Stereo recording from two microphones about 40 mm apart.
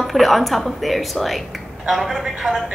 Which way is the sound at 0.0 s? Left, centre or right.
Centre.